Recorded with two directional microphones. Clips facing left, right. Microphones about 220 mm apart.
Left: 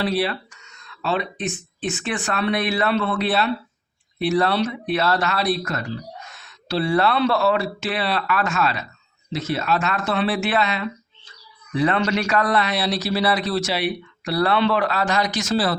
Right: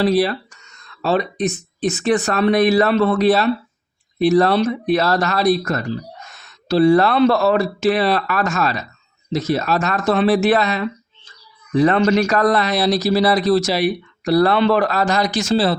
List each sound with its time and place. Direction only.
0.0 s speech: 40° right (ahead or behind)